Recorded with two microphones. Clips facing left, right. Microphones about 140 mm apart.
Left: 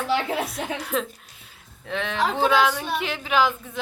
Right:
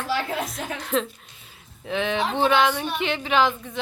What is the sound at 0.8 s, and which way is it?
Speech, 5° left (ahead or behind).